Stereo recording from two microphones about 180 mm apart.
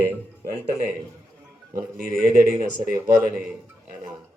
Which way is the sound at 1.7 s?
55° right (ahead or behind).